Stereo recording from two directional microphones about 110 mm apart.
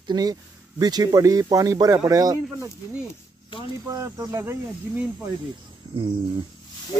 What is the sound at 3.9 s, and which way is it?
Speech, 30° right (ahead or behind).